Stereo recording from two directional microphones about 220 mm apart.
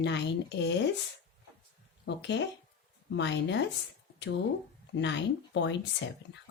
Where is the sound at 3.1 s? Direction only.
55° left (ahead or behind).